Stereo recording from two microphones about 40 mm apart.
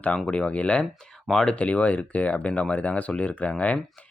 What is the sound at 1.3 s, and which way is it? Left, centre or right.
Speech, centre.